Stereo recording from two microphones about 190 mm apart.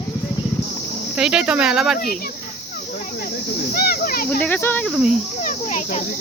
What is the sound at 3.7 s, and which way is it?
Speech, 50° left (ahead or behind).